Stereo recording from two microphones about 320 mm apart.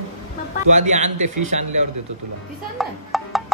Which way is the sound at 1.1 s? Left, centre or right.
Right.